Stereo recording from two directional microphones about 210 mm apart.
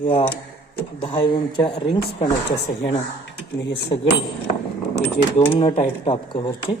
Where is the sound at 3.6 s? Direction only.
55° left (ahead or behind).